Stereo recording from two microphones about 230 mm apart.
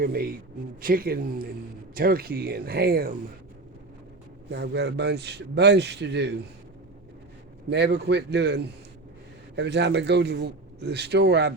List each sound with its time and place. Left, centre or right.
0.0 s speech: right
4.5 s a man's voice: right
7.7 s a man's voice: right